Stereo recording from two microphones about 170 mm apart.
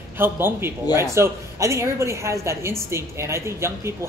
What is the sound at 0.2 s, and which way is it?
A man's voice, 15° right (ahead or behind).